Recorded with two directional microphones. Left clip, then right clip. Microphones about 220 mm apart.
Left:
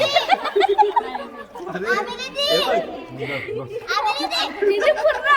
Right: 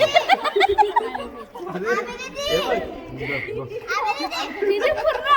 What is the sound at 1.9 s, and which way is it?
Children playing, 40° left (ahead or behind).